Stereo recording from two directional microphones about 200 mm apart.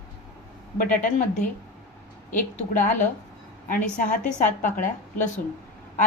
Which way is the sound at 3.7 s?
40° left (ahead or behind).